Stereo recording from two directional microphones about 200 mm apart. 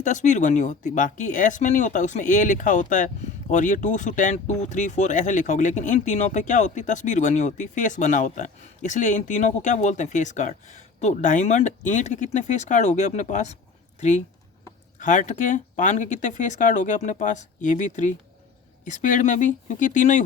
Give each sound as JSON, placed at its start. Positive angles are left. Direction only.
{"t": 0.0, "sound": "speech", "side_deg": 40}